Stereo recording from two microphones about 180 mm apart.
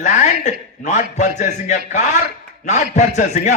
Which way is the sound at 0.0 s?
40° left (ahead or behind).